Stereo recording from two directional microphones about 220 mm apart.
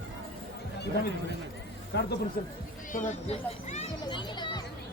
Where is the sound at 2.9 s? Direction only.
35° left (ahead or behind).